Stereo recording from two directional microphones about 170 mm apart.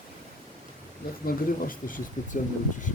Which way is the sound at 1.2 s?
55° left (ahead or behind).